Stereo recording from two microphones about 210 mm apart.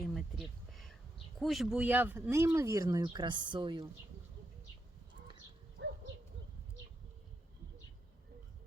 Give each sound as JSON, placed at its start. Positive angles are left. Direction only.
{"t": 0.1, "sound": "a sound", "side_deg": 0}
{"t": 1.4, "sound": "speech", "side_deg": 0}
{"t": 5.8, "sound": "hoot", "side_deg": -55}